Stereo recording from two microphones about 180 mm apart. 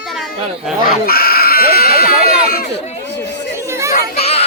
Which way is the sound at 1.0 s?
55° left (ahead or behind).